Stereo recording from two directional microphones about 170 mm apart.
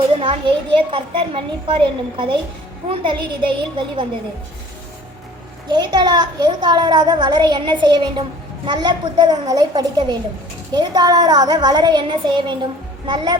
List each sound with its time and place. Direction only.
0.2 s a child's voice: 30° right (ahead or behind)
5.6 s a child's voice: 25° right (ahead or behind)